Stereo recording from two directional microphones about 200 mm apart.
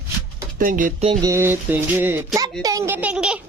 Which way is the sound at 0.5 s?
40° right (ahead or behind).